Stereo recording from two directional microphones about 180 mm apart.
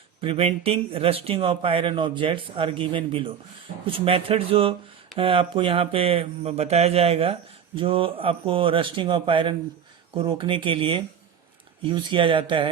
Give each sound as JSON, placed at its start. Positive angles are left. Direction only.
{"t": 0.2, "sound": "speech", "side_deg": -30}